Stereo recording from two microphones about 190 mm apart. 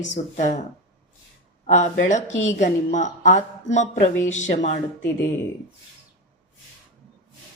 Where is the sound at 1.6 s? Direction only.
40° left (ahead or behind).